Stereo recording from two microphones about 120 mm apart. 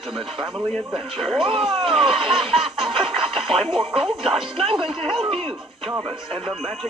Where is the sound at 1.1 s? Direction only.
Centre (ahead or behind).